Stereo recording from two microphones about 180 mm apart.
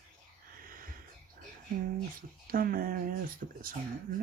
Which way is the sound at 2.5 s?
55° right (ahead or behind).